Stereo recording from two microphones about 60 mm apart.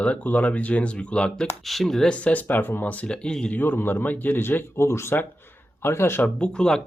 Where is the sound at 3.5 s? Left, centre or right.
Left.